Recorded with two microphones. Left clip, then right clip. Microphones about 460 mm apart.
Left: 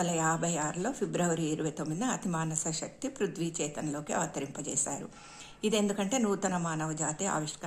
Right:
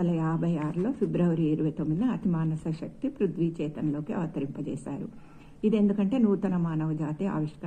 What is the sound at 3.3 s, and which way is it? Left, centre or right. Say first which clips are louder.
Speech: right 4 dB; left.